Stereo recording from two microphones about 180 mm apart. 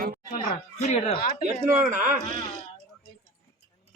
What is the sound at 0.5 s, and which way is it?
Speech, 35° left (ahead or behind).